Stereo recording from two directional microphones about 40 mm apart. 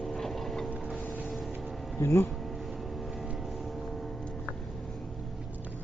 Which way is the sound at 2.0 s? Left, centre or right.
Left.